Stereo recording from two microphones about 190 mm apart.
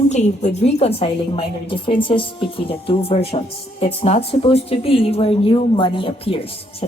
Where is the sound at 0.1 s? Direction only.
35° left (ahead or behind).